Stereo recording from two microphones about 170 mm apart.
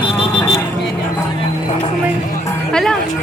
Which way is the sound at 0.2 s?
20° left (ahead or behind).